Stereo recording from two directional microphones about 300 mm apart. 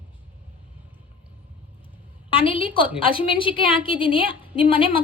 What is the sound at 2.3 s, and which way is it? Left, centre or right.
A woman's voice, centre.